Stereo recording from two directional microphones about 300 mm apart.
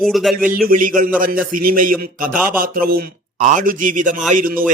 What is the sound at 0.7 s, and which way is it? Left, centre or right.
A man's voice, right.